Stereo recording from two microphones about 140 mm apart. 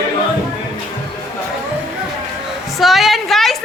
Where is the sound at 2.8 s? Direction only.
Centre (ahead or behind).